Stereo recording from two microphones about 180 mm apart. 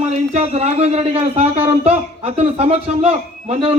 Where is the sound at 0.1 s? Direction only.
35° right (ahead or behind).